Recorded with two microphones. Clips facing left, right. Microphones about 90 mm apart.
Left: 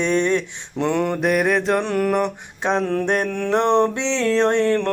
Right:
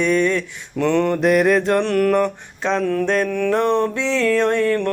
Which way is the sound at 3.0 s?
20° left (ahead or behind).